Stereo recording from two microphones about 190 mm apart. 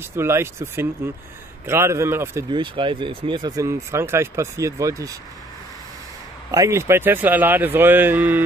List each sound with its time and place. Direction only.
0.1 s speech: 15° right (ahead or behind)
2.5 s speech: 25° right (ahead or behind)
6.5 s speech: 15° right (ahead or behind)